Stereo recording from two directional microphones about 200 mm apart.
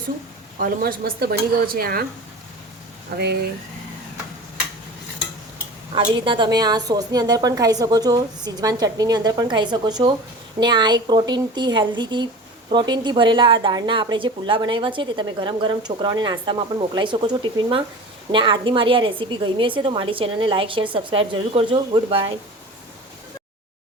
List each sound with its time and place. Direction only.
0.6 s speech: 45° right (ahead or behind)
3.1 s speech: 50° right (ahead or behind)
5.9 s a woman's voice: 25° right (ahead or behind)